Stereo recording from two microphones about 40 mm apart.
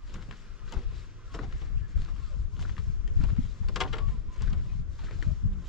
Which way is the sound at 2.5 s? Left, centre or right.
Centre.